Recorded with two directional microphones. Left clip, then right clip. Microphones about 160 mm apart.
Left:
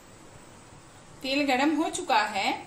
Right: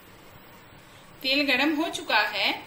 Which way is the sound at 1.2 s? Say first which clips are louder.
Right 2 dB; 50° left (ahead or behind).